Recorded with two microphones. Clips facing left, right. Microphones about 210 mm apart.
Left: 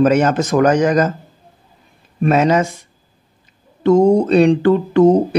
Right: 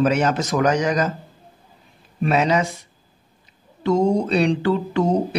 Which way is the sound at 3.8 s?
50° left (ahead or behind).